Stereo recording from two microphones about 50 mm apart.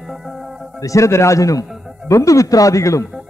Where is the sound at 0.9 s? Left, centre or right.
Left.